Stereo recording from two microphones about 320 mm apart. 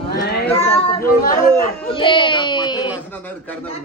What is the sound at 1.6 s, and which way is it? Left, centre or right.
Speech, centre.